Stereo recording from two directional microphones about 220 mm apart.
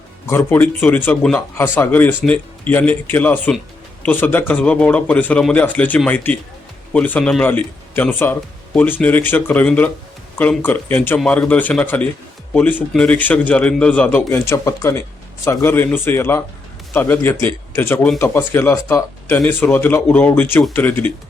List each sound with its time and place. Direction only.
0.3 s speech: 10° left (ahead or behind)